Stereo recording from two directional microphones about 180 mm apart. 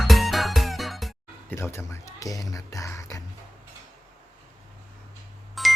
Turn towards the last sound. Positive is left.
turn(degrees=0)  # may be behind; listen again after turning